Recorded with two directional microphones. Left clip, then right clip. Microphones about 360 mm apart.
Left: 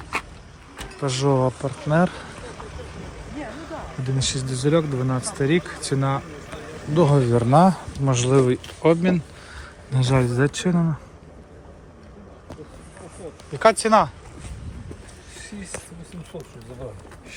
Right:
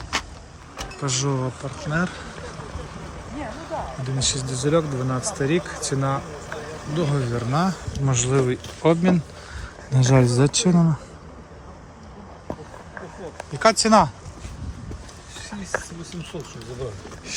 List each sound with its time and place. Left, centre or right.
1.0 s speech: centre
2.7 s vehicle: right
4.0 s speech: centre
13.5 s speech: centre